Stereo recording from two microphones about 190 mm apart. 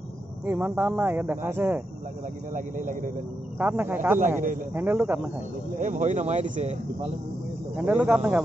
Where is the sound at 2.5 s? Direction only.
45° right (ahead or behind).